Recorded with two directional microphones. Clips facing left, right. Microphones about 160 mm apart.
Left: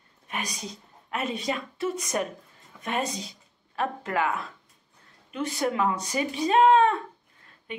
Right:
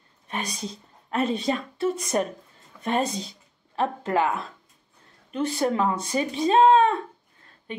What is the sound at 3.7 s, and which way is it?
Speech, 30° right (ahead or behind).